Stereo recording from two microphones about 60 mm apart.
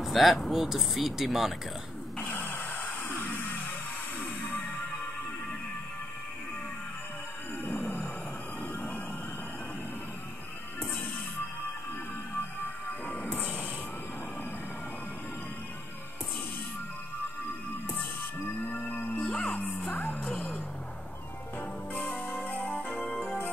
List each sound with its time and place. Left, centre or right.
0.0 s speech: centre
2.1 s a sound: left
7.6 s roar: left
8.7 s music: left
13.0 s music: left
18.7 s music: left
19.9 s music: left
20.2 s vehicle: centre
21.5 s music: left